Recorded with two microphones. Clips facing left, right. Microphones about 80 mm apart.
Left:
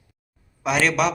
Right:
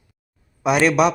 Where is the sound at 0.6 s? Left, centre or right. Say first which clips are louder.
Right 4 dB; centre.